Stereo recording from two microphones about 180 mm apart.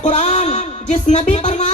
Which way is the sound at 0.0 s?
40° left (ahead or behind).